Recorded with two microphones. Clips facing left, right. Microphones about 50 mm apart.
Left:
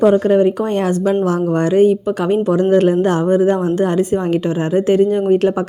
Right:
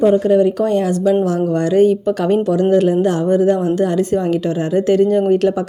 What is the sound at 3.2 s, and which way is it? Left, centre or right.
Speech, left.